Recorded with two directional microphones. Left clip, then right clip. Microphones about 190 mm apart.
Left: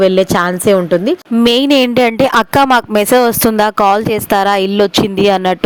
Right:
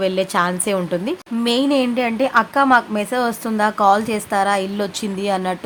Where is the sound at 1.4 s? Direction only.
50° left (ahead or behind).